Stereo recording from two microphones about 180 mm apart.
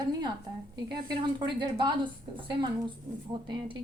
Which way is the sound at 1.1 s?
25° right (ahead or behind).